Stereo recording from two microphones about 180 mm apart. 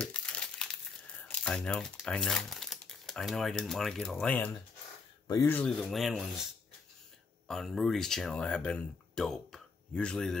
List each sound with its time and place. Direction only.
0.0 s crumpling: 5° left (ahead or behind)
1.2 s speech: 5° left (ahead or behind)
7.4 s speech: centre (ahead or behind)